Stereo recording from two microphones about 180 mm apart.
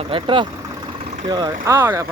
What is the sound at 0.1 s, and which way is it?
Speech, 30° right (ahead or behind).